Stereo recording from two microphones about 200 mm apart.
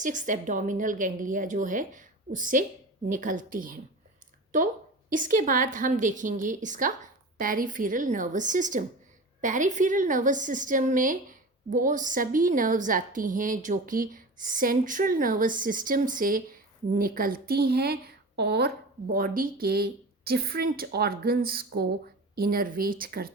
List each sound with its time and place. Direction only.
0.0 s a woman's voice: 40° right (ahead or behind)